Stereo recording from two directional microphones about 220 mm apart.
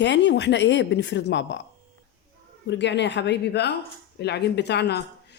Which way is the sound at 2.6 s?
55° left (ahead or behind).